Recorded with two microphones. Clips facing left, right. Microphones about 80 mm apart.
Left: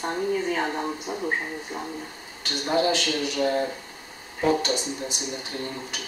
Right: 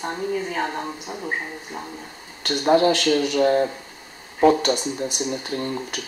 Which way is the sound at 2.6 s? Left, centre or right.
Right.